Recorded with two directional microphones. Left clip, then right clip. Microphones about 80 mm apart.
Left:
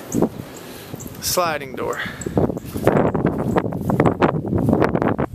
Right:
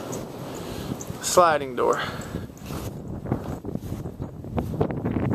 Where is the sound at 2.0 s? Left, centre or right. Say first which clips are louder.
Left 2 dB; right.